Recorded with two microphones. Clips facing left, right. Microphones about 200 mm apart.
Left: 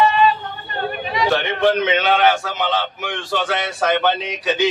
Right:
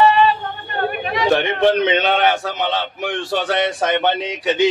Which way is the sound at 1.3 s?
25° right (ahead or behind).